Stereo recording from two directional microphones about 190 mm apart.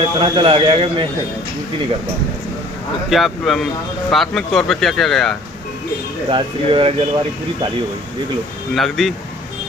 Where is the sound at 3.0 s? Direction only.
Centre (ahead or behind).